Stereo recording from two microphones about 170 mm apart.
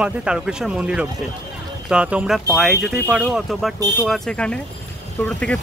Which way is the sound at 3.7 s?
25° right (ahead or behind).